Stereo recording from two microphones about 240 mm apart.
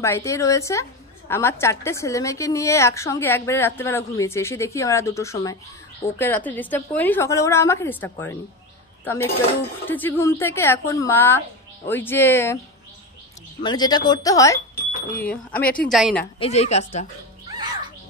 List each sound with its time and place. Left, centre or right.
0.0 s a woman's voice: centre
13.6 s a woman's voice: centre
16.3 s a woman's voice: left